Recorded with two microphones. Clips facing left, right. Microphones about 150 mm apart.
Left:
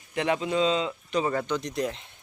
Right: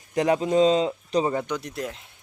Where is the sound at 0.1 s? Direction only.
40° right (ahead or behind).